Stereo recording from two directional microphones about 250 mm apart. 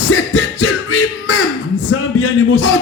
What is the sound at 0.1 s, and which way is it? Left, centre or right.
Music, left.